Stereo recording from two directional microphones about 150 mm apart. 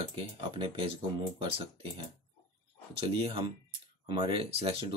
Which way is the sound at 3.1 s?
35° right (ahead or behind).